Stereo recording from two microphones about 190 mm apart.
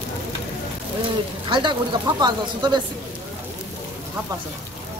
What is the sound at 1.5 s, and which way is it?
Speech, 25° right (ahead or behind).